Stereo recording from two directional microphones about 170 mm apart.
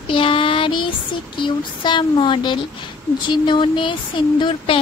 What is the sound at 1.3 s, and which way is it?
A woman's voice, 30° left (ahead or behind).